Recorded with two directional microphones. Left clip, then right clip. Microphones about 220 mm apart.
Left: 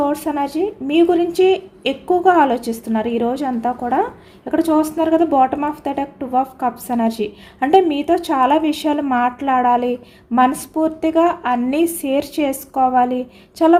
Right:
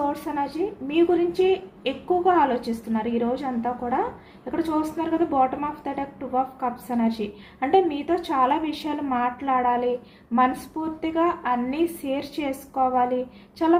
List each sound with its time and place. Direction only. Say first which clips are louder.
0.1 s a woman's voice: left 7 dB; 50° left (ahead or behind)